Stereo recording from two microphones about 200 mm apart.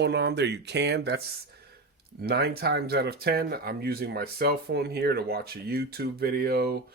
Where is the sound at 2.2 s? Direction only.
50° right (ahead or behind).